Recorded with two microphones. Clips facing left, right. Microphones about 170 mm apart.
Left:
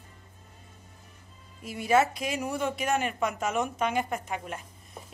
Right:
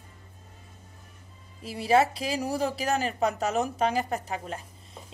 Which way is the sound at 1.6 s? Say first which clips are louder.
Right 1 dB; 30° right (ahead or behind).